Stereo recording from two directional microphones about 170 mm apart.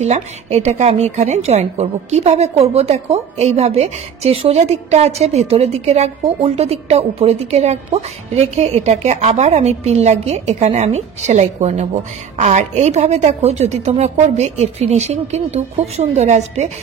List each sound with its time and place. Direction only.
0.0 s a woman's voice: 40° right (ahead or behind)